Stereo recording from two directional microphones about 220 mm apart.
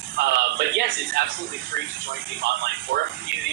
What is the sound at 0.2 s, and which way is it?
A man's voice, 50° right (ahead or behind).